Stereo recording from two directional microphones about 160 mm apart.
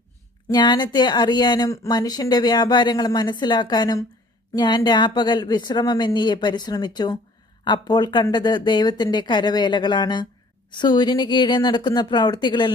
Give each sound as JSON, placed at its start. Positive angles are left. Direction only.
{"t": 0.5, "sound": "speech", "side_deg": 25}